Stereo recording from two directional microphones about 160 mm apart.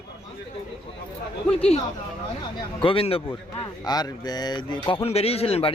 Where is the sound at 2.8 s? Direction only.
35° left (ahead or behind).